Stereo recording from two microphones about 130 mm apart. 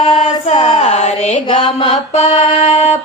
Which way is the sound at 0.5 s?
35° left (ahead or behind).